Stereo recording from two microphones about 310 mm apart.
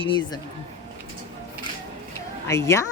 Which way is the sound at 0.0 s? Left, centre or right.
Centre.